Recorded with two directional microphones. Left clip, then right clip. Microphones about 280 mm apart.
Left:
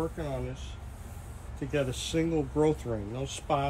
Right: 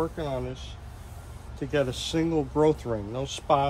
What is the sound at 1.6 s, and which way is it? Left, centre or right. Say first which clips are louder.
Speech: right 4 dB; centre.